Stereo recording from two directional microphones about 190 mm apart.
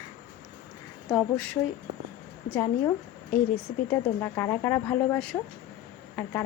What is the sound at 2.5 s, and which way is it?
Speech, 15° left (ahead or behind).